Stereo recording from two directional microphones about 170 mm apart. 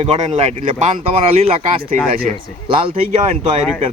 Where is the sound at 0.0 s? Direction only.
35° right (ahead or behind).